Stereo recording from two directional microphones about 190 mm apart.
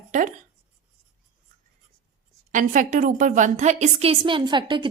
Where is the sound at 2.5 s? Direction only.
40° right (ahead or behind).